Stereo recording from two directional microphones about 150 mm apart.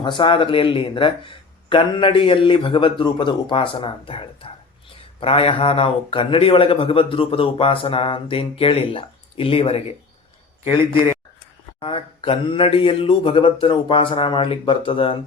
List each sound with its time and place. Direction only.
0.0 s speech: 35° left (ahead or behind)
11.8 s speech: 35° left (ahead or behind)